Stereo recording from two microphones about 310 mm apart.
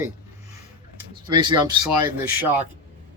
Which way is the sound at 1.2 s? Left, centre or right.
Centre.